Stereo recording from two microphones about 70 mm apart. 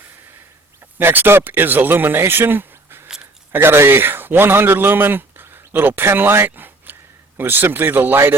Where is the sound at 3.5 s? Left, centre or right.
Right.